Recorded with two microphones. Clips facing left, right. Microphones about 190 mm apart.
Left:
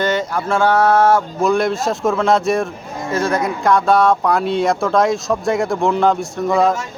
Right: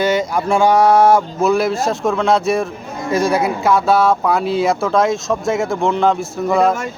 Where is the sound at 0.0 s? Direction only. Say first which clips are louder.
Right 2 dB; 10° right (ahead or behind).